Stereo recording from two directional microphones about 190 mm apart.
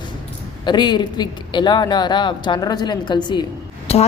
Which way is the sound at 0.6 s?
25° left (ahead or behind).